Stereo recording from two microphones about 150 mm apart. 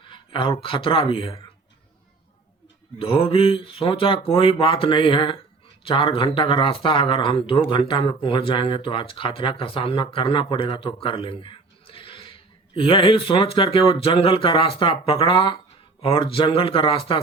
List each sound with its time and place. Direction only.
0.1 s speech: 35° left (ahead or behind)
3.0 s speech: 40° left (ahead or behind)